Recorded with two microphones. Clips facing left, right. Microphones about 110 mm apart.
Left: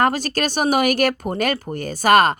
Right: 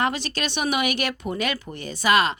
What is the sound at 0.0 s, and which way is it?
Speech, 45° left (ahead or behind).